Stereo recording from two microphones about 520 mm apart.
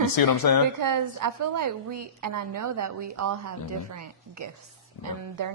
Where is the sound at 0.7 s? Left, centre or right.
Right.